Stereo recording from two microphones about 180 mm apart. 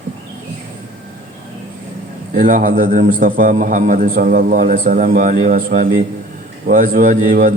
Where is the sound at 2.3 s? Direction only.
50° right (ahead or behind).